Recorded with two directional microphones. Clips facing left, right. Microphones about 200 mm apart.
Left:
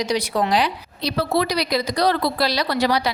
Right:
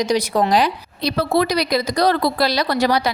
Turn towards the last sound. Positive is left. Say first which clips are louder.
# right 2 dB
turn(degrees=-45)  # may be behind; listen again after turning